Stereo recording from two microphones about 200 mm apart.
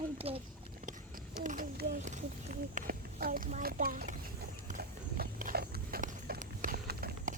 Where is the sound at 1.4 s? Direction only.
45° right (ahead or behind).